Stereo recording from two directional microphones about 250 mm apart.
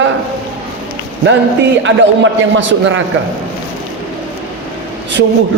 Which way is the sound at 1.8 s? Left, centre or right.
Right.